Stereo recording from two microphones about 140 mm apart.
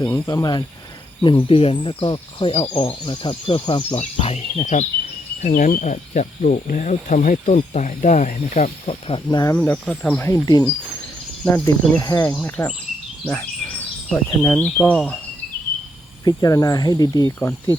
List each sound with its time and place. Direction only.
0.0 s speech: 30° left (ahead or behind); by 4.6 s 45° left (ahead or behind)
4.6 s speech: 60° left (ahead or behind)
5.4 s speech: 70° left (ahead or behind); by 9.2 s 45° left (ahead or behind)
9.3 s speech: 25° left (ahead or behind)
9.6 s speech: 10° left (ahead or behind)
10.2 s speech: 25° left (ahead or behind)
12.3 s speech: 10° left (ahead or behind)
16.2 s speech: 25° left (ahead or behind)